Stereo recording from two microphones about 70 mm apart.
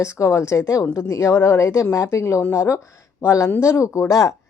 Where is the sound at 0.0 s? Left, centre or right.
Left.